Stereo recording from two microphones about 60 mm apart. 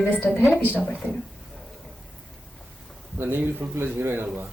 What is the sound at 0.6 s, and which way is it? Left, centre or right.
Speech, left.